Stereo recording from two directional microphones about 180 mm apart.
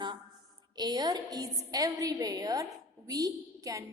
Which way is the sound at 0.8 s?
20° right (ahead or behind).